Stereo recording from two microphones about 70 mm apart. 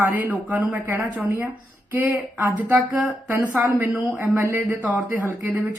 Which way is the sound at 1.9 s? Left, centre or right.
Right.